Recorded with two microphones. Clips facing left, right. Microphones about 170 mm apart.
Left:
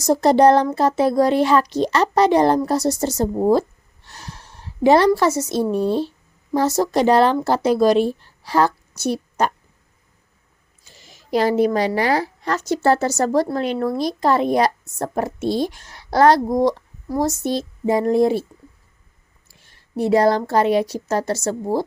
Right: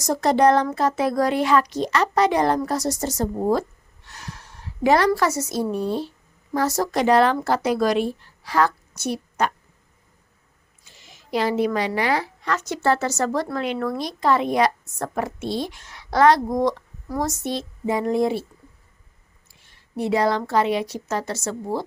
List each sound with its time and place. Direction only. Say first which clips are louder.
0.0 s a woman's voice: left 4 dB; 30° left (ahead or behind)
10.8 s speech: left 6 dB; 40° left (ahead or behind)
19.5 s a woman's voice: left 3 dB; 40° left (ahead or behind)